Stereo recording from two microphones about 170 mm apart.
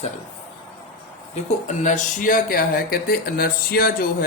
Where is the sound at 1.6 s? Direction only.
45° left (ahead or behind).